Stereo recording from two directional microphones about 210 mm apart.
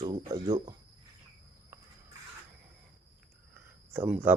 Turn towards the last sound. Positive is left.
turn(degrees=-10)  # may be behind; listen again after turning